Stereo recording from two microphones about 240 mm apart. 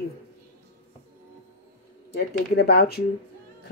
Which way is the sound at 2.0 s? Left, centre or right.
Left.